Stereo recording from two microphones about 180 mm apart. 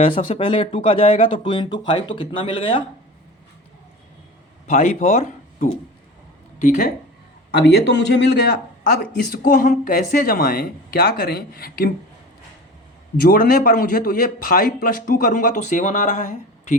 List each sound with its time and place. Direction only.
0.1 s a man's voice: 50° left (ahead or behind)
0.3 s speech: 30° left (ahead or behind)
4.6 s speech: 40° left (ahead or behind)
7.5 s speech: 70° left (ahead or behind)
9.0 s speech: 55° left (ahead or behind)
13.1 s a man's voice: 55° left (ahead or behind)